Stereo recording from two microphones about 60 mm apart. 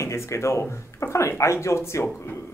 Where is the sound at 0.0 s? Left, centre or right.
Left.